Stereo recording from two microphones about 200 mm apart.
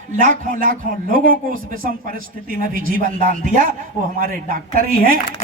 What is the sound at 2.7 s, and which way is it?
Speech, 45° right (ahead or behind).